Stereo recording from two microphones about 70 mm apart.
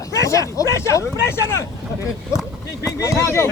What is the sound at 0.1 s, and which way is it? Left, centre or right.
Speech, left.